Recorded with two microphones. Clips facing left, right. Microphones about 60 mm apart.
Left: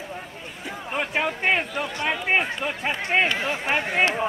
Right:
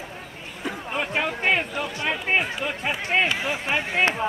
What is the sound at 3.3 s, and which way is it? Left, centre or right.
Speech, centre.